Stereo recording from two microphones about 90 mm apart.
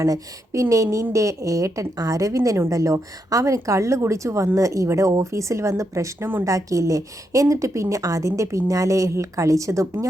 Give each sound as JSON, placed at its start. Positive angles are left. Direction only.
{"t": 0.0, "sound": "a woman's voice", "side_deg": -35}
{"t": 6.4, "sound": "a woman's voice", "side_deg": -40}